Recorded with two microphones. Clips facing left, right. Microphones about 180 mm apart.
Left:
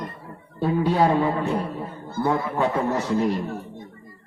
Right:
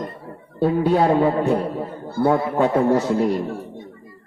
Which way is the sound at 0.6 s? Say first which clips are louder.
Right 3 dB; 50° right (ahead or behind).